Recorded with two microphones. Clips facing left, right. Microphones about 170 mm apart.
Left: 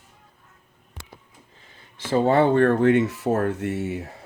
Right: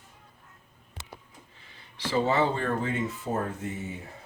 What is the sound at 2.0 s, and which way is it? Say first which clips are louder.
Speech: left 6 dB; 50° left (ahead or behind).